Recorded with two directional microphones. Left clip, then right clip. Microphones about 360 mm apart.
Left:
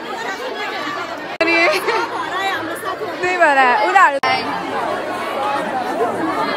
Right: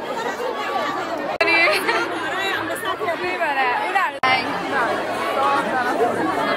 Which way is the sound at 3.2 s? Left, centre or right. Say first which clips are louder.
Left 10 dB; left.